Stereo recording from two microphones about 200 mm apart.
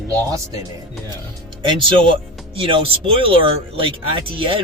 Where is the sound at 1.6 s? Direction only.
25° right (ahead or behind).